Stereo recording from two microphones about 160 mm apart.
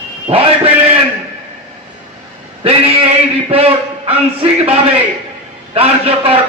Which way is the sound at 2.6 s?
35° right (ahead or behind).